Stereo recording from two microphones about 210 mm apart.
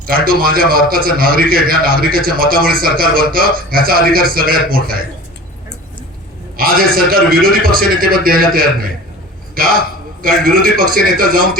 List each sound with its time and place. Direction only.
0.1 s a man's voice: 45° right (ahead or behind)
6.6 s a man's voice: 45° right (ahead or behind)